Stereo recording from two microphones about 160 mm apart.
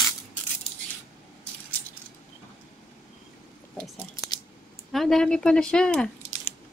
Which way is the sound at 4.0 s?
20° left (ahead or behind).